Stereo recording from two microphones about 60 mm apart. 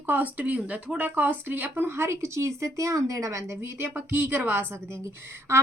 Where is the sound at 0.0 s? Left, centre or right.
Right.